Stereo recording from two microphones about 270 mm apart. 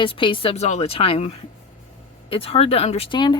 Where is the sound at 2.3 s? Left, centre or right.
Left.